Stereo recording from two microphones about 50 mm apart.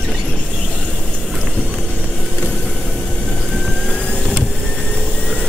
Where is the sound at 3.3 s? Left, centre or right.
Centre.